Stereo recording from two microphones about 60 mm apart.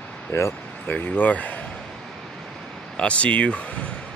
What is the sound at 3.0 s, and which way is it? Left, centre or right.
Speech, left.